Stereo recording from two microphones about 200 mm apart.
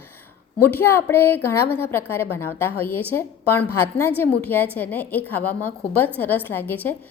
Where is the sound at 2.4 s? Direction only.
90° left.